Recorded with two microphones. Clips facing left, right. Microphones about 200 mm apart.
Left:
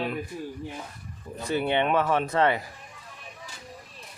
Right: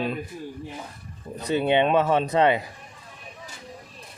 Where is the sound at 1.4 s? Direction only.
20° right (ahead or behind).